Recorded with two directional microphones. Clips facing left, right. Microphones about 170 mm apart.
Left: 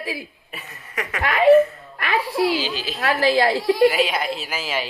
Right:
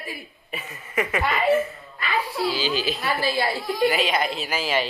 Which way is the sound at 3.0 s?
90° left.